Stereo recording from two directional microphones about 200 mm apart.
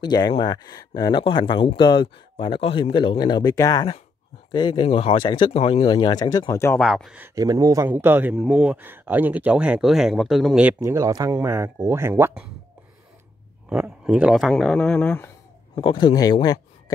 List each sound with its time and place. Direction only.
0.0 s speech: 20° left (ahead or behind); by 7.2 s centre (ahead or behind)
7.3 s speech: 20° right (ahead or behind)
13.7 s speech: 5° right (ahead or behind)
15.7 s speech: 25° left (ahead or behind)